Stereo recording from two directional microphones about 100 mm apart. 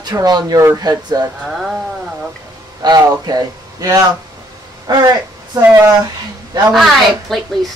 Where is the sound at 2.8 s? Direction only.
40° right (ahead or behind).